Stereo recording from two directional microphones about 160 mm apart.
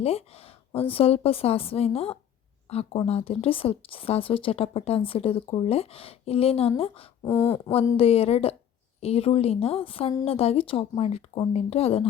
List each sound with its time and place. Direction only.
0.0 s speech: 40° left (ahead or behind)
7.3 s speech: 20° left (ahead or behind)
7.9 s speech: 40° left (ahead or behind)